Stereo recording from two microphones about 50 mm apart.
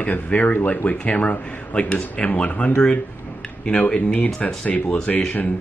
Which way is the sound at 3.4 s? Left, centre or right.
Centre.